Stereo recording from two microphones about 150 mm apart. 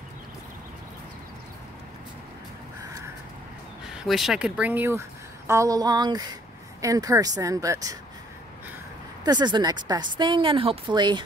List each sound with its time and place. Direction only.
3.8 s speech: 5° right (ahead or behind); by 8.0 s 20° right (ahead or behind)
9.2 s speech: 30° right (ahead or behind)